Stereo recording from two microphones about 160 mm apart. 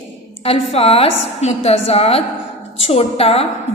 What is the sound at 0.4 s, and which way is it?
A woman's voice, 40° left (ahead or behind).